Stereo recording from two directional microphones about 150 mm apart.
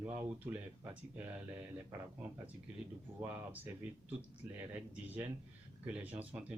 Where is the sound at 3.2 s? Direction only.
10° right (ahead or behind).